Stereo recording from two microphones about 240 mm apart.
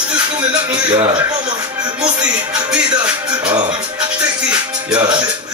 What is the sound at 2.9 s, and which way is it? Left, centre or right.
Speech, centre.